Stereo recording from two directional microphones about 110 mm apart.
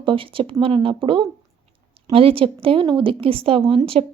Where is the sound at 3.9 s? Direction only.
80° right.